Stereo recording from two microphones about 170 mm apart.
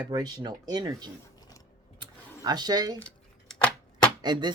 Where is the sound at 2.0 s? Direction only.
25° right (ahead or behind).